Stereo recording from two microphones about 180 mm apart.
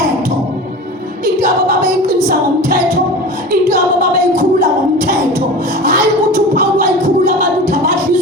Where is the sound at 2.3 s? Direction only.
55° right (ahead or behind).